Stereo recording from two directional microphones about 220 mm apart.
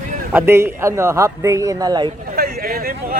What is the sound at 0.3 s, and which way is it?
Speech, 10° right (ahead or behind).